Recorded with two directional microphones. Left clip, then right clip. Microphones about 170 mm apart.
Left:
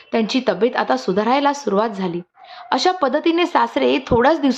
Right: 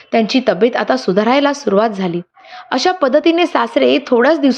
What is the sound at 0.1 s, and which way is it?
A woman's voice, 15° right (ahead or behind).